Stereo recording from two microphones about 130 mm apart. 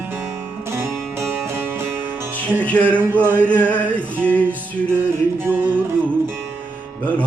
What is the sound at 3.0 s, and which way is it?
Music, 15° right (ahead or behind).